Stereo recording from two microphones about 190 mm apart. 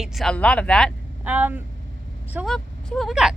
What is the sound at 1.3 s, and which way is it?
Speech, 10° right (ahead or behind).